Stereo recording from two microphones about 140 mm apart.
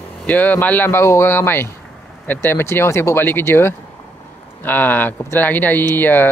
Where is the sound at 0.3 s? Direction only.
10° left (ahead or behind).